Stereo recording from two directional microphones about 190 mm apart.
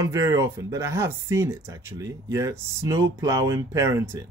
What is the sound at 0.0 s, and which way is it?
Speech, 15° right (ahead or behind).